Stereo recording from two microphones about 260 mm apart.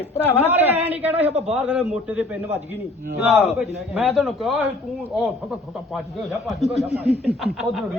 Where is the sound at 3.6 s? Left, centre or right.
Centre.